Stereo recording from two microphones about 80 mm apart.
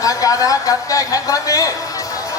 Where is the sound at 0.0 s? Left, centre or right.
Left.